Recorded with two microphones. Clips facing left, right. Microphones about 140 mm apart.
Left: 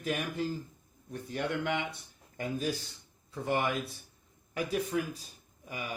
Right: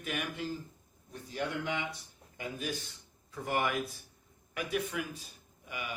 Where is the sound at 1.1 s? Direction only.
55° left (ahead or behind).